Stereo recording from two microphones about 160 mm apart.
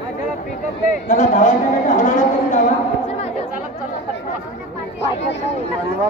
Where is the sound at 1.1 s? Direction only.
50° left (ahead or behind).